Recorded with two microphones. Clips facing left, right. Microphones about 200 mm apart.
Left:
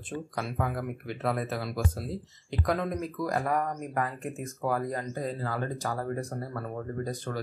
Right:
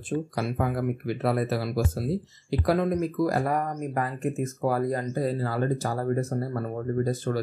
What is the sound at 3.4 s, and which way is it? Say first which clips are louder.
Speech: right 3 dB; 30° right (ahead or behind).